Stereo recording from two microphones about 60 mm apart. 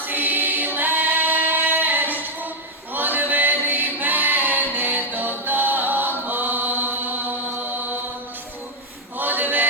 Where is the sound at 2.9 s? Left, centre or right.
Right.